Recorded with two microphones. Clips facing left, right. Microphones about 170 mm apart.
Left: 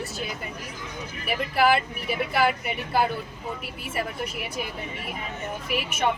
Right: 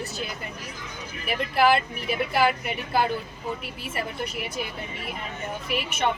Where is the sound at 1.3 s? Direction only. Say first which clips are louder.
Right 1 dB; 5° left (ahead or behind).